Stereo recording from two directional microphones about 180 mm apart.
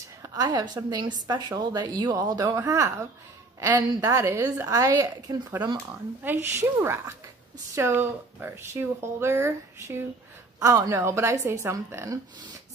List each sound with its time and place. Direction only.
0.2 s a woman's voice: 20° right (ahead or behind)
6.2 s speech: 10° right (ahead or behind)